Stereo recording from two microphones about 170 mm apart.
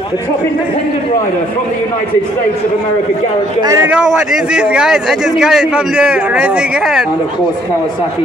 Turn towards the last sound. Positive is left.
turn(degrees=0)  # may be behind; listen again after turning